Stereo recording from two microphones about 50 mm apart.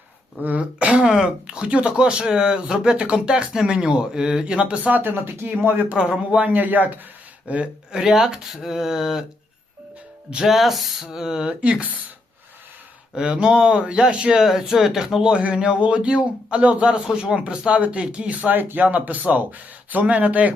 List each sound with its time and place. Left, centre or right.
0.4 s speech: right
1.0 s speech: centre
4.8 s speech: right
5.9 s speech: right
6.4 s speech: right
7.4 s speech: right
7.9 s speech: centre
10.4 s speech: centre
11.6 s speech: right
13.1 s speech: centre; by 20.5 s right